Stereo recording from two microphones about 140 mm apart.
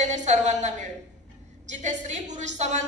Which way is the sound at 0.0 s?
55° right (ahead or behind).